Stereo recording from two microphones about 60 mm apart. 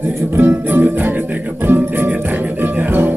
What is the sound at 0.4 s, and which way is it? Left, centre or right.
Music, right.